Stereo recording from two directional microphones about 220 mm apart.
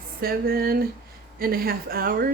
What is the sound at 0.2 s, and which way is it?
A woman's voice, 45° right (ahead or behind).